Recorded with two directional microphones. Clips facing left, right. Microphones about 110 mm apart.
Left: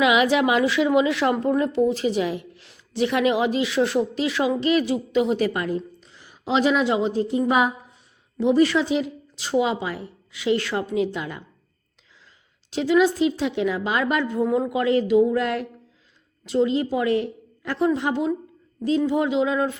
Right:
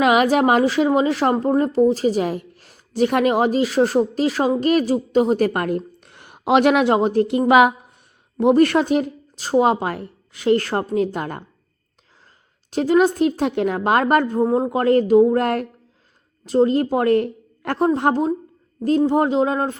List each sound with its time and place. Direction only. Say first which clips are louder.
0.0 s a woman's voice: right 3 dB; 45° right (ahead or behind); by 7.9 s 70° right (ahead or behind)
8.4 s a woman's voice: right 4 dB; 55° right (ahead or behind)
12.7 s a woman's voice: right 3 dB; 50° right (ahead or behind)
14.4 s a woman's voice: right 4 dB; 35° right (ahead or behind)